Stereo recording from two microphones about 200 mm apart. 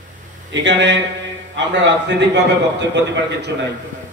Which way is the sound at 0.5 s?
60° right (ahead or behind).